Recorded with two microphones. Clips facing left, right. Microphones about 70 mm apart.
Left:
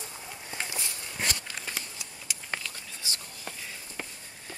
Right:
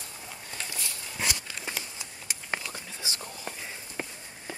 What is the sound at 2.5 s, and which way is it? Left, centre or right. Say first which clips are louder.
Whispering: right 3 dB; centre.